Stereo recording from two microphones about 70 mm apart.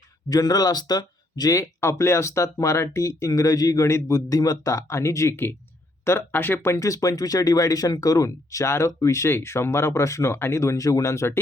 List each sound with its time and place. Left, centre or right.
0.3 s speech: left
1.8 s speech: left
3.8 s speech: left
6.1 s speech: left
6.7 s speech: left